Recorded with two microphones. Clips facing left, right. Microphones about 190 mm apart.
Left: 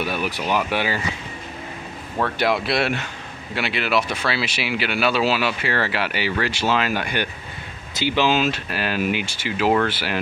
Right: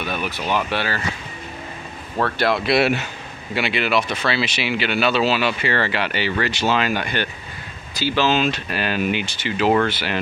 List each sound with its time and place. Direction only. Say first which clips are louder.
0.0 s speech: left 1 dB; 10° left (ahead or behind)
2.2 s speech: right 1 dB; 15° left (ahead or behind)
2.6 s speech: right 4 dB; 5° right (ahead or behind)
7.9 s speech: even; 20° left (ahead or behind)
8.4 s speech: right 1 dB; 5° left (ahead or behind)